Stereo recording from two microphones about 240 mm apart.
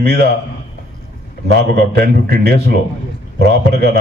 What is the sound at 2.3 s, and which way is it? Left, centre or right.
Speech, right.